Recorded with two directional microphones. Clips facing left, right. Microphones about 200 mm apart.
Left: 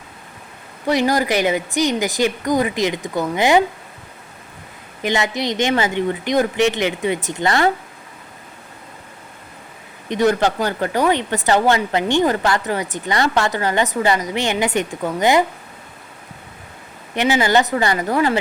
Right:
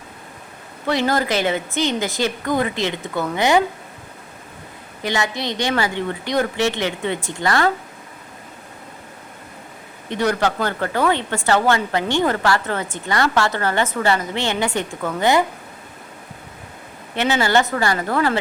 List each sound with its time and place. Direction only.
0.9 s a woman's voice: 15° left (ahead or behind)
5.0 s speech: 20° left (ahead or behind)
10.1 s a woman's voice: 20° left (ahead or behind)
17.2 s a woman's voice: 15° left (ahead or behind)